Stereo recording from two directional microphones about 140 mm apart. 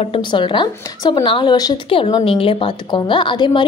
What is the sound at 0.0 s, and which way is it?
A woman's voice, 40° left (ahead or behind).